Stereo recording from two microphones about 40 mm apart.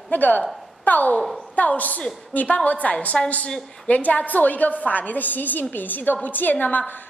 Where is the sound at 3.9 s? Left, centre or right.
Left.